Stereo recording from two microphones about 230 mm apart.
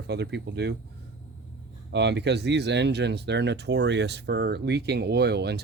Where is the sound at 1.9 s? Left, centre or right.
Right.